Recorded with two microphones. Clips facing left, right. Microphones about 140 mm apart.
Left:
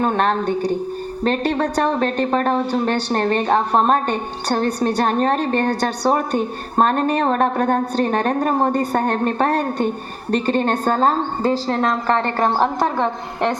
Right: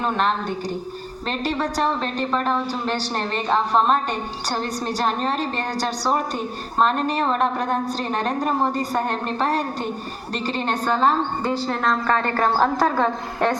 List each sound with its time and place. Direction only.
0.0 s a woman's voice: 50° left (ahead or behind)
11.7 s a woman's voice: 30° left (ahead or behind)